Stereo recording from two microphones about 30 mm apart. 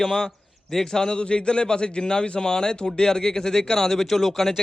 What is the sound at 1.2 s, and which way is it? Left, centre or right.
A man's voice, left.